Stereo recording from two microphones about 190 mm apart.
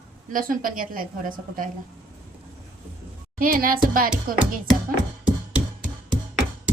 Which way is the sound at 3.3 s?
45° right (ahead or behind).